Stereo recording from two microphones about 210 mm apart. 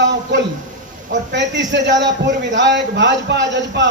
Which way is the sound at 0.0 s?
55° right (ahead or behind).